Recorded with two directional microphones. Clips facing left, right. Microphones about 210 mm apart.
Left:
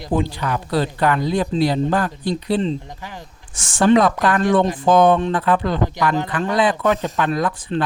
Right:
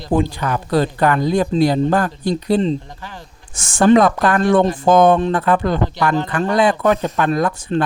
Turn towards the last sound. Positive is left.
turn(degrees=-45)  # may be behind; listen again after turning